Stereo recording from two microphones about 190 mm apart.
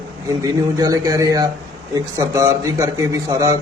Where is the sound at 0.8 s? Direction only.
20° right (ahead or behind).